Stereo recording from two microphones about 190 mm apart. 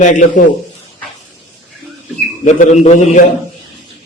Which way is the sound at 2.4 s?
40° left (ahead or behind).